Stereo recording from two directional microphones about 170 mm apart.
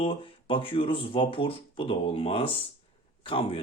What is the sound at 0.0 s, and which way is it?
Speech, 30° left (ahead or behind).